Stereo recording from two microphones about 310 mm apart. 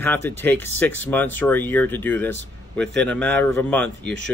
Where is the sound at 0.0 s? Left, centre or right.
Centre.